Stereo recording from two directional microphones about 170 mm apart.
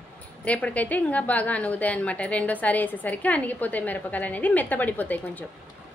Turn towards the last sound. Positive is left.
turn(degrees=10)  # may be behind; listen again after turning